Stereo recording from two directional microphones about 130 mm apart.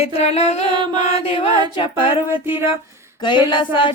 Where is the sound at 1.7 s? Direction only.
40° left (ahead or behind).